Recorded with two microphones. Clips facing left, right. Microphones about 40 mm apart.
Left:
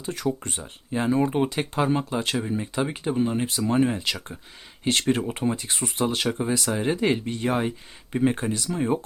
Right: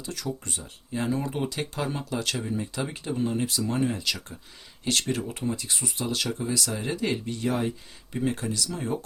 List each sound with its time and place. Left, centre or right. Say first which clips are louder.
0.0 s speech: left 6 dB; left